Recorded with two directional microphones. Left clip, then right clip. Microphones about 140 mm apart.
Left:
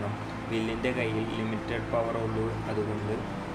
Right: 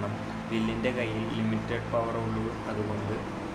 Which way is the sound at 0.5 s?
25° left (ahead or behind).